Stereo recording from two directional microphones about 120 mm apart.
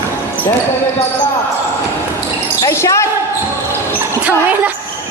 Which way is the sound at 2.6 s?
25° left (ahead or behind).